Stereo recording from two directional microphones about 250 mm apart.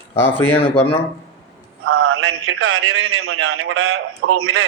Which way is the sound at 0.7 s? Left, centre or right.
Left.